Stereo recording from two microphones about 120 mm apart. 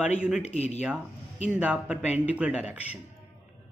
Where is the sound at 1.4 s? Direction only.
10° right (ahead or behind).